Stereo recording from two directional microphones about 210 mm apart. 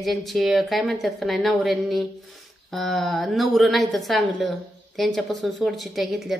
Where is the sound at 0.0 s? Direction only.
Centre (ahead or behind).